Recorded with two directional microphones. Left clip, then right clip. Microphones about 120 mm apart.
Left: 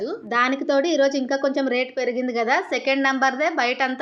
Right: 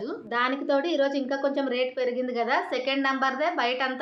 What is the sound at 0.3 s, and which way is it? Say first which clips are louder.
A woman's voice: left 5 dB; 55° left (ahead or behind).